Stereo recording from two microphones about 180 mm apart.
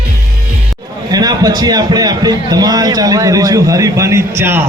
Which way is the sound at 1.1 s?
20° right (ahead or behind).